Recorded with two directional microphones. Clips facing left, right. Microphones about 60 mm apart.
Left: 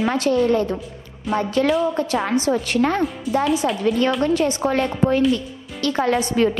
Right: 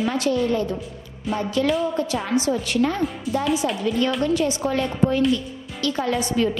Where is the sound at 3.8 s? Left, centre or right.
Left.